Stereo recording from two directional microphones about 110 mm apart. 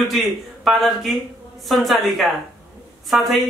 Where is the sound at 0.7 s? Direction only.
Centre (ahead or behind).